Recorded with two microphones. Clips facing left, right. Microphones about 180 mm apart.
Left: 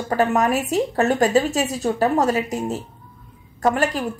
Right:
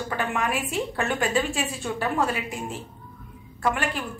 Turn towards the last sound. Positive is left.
turn(degrees=40)  # may be behind; listen again after turning